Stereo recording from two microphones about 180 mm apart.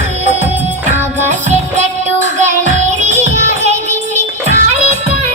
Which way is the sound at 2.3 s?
40° right (ahead or behind).